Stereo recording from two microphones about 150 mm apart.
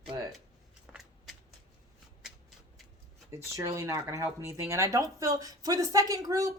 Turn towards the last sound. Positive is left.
turn(degrees=-25)  # may be behind; listen again after turning